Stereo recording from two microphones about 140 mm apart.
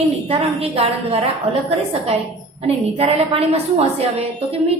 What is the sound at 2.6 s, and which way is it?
A woman's voice, 45° right (ahead or behind).